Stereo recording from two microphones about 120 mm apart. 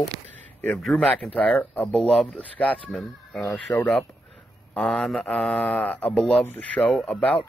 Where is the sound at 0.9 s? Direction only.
5° left (ahead or behind).